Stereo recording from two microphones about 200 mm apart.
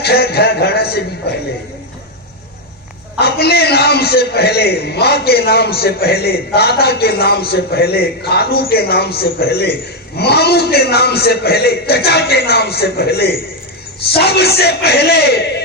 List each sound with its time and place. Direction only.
0.0 s a man's voice: 50° left (ahead or behind)
3.2 s a man's voice: 50° left (ahead or behind)